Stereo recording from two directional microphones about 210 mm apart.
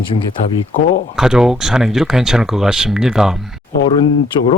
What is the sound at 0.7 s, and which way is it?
Speech, 45° left (ahead or behind).